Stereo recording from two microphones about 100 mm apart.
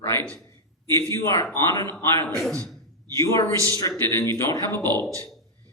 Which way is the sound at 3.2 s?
30° left (ahead or behind).